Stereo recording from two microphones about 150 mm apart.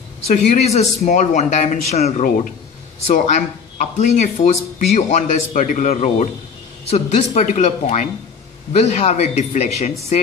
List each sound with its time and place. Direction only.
0.3 s a man's voice: 50° left (ahead or behind)
3.1 s a man's voice: 60° left (ahead or behind)